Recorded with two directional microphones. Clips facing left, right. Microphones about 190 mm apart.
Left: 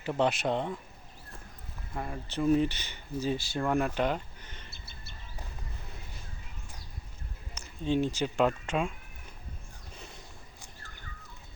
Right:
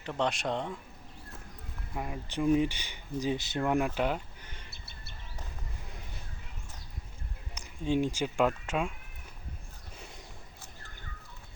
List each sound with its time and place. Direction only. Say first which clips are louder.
0.0 s speech: left 3 dB; 5° left (ahead or behind)
2.0 s speech: even; 10° right (ahead or behind)
3.6 s speech: even; 10° right (ahead or behind)
7.5 s speech: even; 15° right (ahead or behind)